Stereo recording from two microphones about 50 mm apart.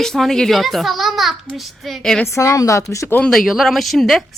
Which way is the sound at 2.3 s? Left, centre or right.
Left.